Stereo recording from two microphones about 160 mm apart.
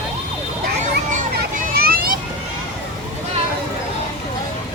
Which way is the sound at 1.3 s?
70° right (ahead or behind).